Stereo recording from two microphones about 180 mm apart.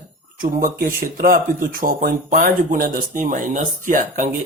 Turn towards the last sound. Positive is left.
turn(degrees=-45)  # may be behind; listen again after turning